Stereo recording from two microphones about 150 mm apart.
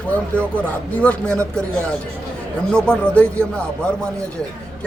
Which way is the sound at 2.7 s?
5° left (ahead or behind).